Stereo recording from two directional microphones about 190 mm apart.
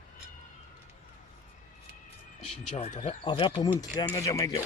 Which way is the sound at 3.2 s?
25° left (ahead or behind).